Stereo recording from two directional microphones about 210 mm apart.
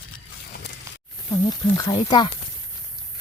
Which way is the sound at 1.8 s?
20° left (ahead or behind).